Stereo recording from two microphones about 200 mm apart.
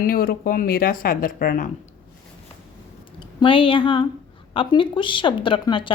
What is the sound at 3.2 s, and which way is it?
Speech, 25° left (ahead or behind).